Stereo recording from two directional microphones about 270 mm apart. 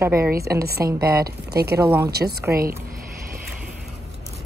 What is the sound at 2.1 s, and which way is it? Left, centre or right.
Speech, right.